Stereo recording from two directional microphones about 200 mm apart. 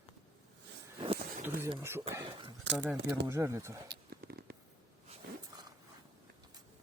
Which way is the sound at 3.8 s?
55° right (ahead or behind).